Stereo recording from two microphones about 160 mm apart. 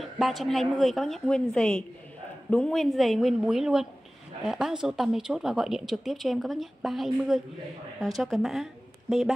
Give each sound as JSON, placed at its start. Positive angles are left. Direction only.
{"t": 0.0, "sound": "speech", "side_deg": 0}